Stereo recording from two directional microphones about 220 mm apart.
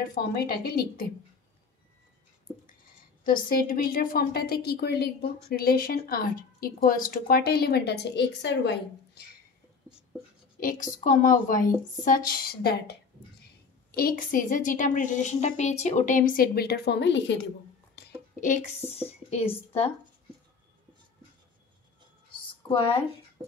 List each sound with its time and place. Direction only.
0.1 s a woman's voice: 45° left (ahead or behind)
3.3 s a woman's voice: 40° left (ahead or behind)
10.6 s a woman's voice: 40° left (ahead or behind)
13.9 s a woman's voice: 40° left (ahead or behind)
18.0 s a sound: 50° left (ahead or behind)
18.4 s speech: 35° left (ahead or behind)